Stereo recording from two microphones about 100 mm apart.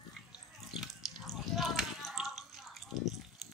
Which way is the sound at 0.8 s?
Centre (ahead or behind).